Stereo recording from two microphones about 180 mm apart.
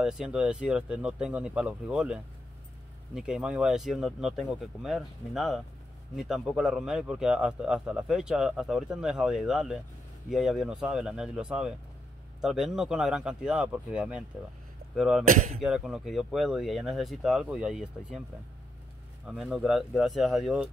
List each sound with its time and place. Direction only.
0.0 s a man's voice: 5° right (ahead or behind)
15.2 s speech: 40° right (ahead or behind)
15.6 s a man's voice: centre (ahead or behind)
19.3 s a man's voice: centre (ahead or behind)